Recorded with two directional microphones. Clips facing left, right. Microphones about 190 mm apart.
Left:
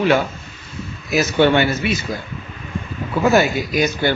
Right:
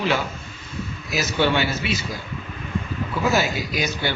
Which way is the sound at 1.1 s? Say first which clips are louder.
Left 7 dB; 55° left (ahead or behind).